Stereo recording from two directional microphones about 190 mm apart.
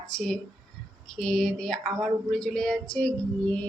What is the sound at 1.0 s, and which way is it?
A woman's voice, 5° left (ahead or behind).